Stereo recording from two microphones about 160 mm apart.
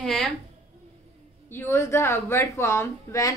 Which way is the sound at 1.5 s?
15° left (ahead or behind).